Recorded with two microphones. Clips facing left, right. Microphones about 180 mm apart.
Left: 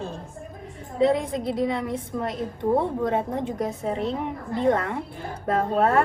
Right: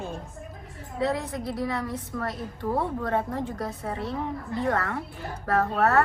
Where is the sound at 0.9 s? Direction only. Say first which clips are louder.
Left 6 dB; 25° left (ahead or behind).